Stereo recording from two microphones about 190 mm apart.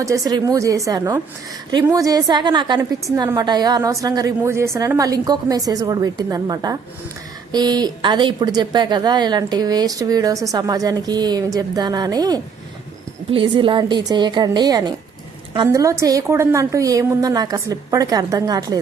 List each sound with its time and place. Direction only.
0.0 s a woman's voice: 20° right (ahead or behind)